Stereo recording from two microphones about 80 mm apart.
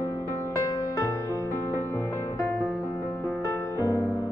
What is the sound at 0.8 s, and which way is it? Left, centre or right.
Music, left.